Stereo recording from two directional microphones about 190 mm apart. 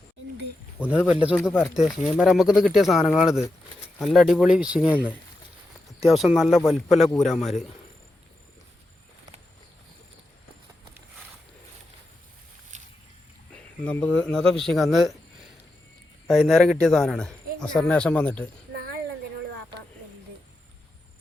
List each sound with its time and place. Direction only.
0.8 s speech: 5° right (ahead or behind)
6.0 s speech: centre (ahead or behind)
12.7 s boat: 40° right (ahead or behind)
13.5 s speech: 5° left (ahead or behind)
16.2 s speech: centre (ahead or behind)